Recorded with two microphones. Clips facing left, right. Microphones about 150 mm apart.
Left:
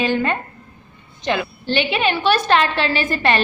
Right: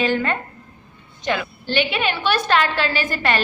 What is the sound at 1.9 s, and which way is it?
A woman's voice, 25° left (ahead or behind).